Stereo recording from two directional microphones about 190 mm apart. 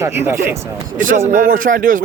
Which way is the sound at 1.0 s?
45° right (ahead or behind).